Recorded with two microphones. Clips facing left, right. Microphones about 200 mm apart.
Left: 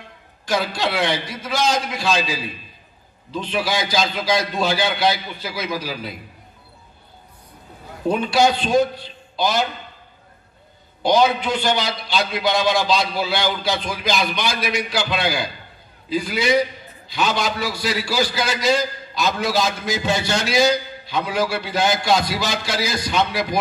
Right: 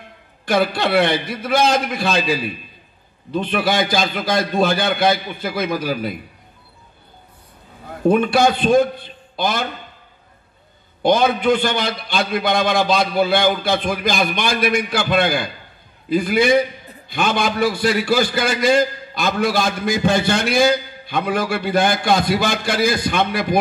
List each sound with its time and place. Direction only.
0.5 s a man's voice: 55° right (ahead or behind)
8.1 s a man's voice: 55° right (ahead or behind)
11.0 s a man's voice: 55° right (ahead or behind)